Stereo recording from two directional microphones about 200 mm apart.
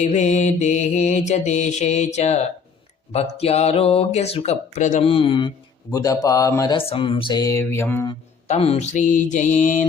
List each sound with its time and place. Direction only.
0.0 s mantra: 35° left (ahead or behind)
3.1 s speech: 30° left (ahead or behind)
8.4 s mantra: 30° left (ahead or behind)